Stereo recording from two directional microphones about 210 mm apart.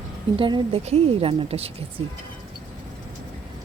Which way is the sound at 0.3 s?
25° right (ahead or behind).